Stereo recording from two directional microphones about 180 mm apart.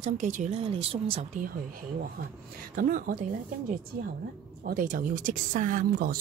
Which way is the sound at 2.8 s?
50° right (ahead or behind).